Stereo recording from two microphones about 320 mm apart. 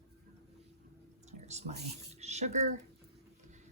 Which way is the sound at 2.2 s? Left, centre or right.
Right.